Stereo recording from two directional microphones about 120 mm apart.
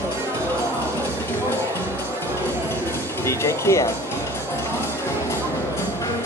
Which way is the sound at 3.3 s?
25° left (ahead or behind).